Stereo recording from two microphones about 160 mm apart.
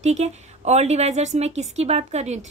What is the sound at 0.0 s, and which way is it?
Speech, 45° right (ahead or behind).